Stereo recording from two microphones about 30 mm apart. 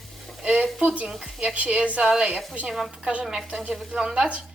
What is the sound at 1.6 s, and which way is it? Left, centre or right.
Speech, right.